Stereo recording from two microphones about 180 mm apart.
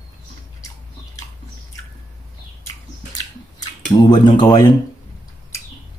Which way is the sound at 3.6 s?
25° left (ahead or behind).